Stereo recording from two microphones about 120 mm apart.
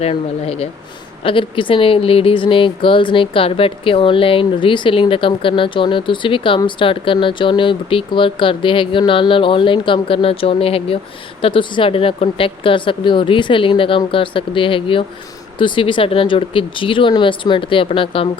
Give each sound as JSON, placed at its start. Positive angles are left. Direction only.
{"t": 0.0, "sound": "speech", "side_deg": 55}